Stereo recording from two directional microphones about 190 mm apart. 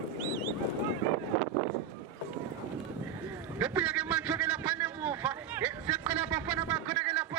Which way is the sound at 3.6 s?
5° right (ahead or behind).